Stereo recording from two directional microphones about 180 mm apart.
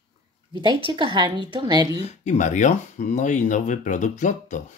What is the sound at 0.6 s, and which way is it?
A woman's voice, 25° right (ahead or behind).